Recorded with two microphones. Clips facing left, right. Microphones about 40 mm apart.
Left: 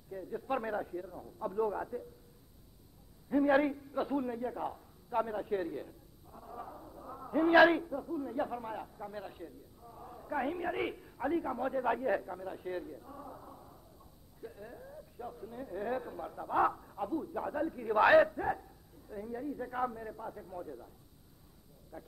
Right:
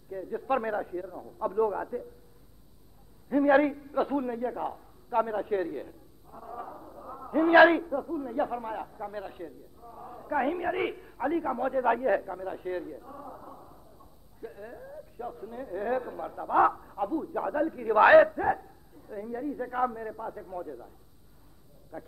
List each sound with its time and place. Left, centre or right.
0.1 s a man's voice: centre
3.3 s a man's voice: centre
21.9 s a man's voice: centre